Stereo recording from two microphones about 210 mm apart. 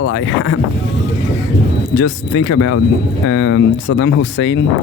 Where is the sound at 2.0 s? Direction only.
90° left.